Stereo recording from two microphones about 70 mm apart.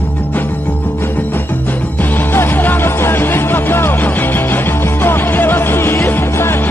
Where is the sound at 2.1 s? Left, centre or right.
Left.